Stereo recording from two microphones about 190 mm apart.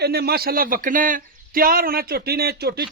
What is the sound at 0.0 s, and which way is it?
A man's voice, 55° right (ahead or behind).